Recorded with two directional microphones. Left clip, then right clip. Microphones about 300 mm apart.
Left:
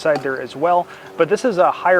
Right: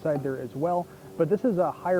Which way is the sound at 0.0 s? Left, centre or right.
Centre.